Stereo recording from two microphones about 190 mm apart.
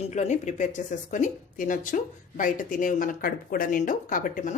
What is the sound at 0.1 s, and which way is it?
A woman's voice, 40° left (ahead or behind).